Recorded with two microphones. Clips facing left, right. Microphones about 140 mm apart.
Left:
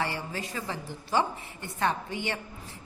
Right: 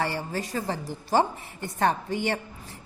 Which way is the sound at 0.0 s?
40° right (ahead or behind).